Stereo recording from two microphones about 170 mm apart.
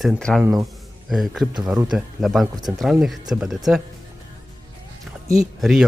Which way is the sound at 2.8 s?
Centre (ahead or behind).